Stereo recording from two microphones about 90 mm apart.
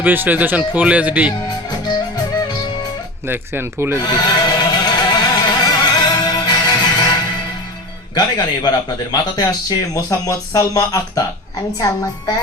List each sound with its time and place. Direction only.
0.0 s speech: 20° right (ahead or behind)
3.2 s speech: 25° right (ahead or behind)
3.9 s music: 45° left (ahead or behind)
8.1 s a man's voice: 50° left (ahead or behind)